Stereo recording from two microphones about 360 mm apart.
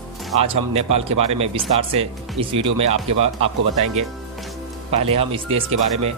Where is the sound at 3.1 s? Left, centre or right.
Right.